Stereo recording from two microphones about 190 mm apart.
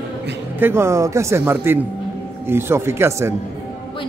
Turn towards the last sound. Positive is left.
turn(degrees=-15)  # may be behind; listen again after turning